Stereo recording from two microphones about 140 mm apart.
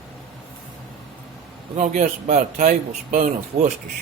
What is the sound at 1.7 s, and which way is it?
Speech, 60° right (ahead or behind).